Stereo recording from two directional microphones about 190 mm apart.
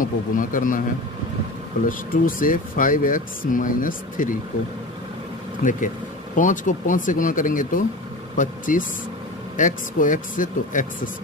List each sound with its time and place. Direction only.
0.0 s speech: 45° left (ahead or behind)
1.9 s speech: 45° left (ahead or behind)
5.6 s speech: 45° left (ahead or behind)